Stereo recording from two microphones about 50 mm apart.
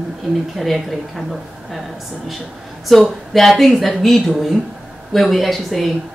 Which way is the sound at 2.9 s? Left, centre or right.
Centre.